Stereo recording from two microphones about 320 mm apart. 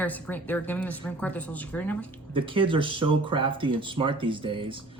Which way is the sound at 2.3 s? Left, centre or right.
Centre.